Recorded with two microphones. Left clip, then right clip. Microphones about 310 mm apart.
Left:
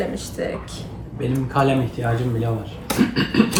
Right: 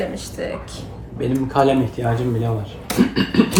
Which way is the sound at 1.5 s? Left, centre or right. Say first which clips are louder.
Right 3 dB; right.